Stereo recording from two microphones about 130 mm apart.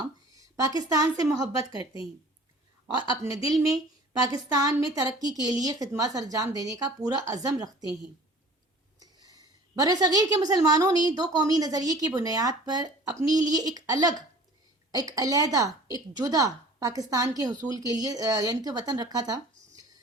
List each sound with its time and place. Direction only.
0.3 s a woman's voice: 25° right (ahead or behind)
9.0 s a woman's voice: 30° right (ahead or behind)